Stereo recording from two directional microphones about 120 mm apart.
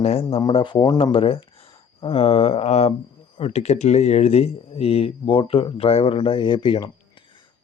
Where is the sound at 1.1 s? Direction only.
50° left (ahead or behind).